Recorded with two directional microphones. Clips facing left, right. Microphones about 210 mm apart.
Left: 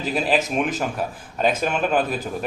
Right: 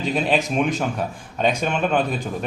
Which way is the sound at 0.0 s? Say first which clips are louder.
Right 1 dB; 5° left (ahead or behind).